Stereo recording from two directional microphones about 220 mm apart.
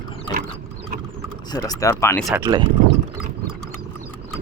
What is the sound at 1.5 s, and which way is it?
Speech, 15° left (ahead or behind).